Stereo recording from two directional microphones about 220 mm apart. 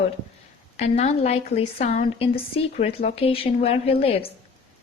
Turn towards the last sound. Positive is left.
turn(degrees=25)  # may be behind; listen again after turning